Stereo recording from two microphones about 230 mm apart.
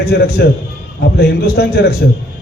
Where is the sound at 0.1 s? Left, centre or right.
Left.